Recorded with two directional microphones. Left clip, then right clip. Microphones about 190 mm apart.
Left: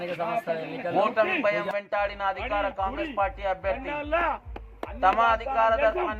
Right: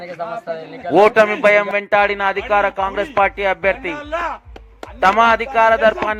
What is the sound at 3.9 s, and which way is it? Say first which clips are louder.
Speech: right 4 dB; 15° right (ahead or behind).